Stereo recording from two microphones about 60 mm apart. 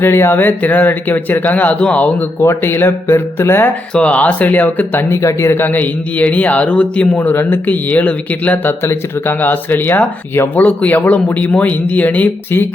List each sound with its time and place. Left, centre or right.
0.0 s speech: left
2.6 s speech: left
3.9 s speech: left
5.1 s speech: left
5.6 s speech: left
7.2 s speech: left
8.8 s speech: left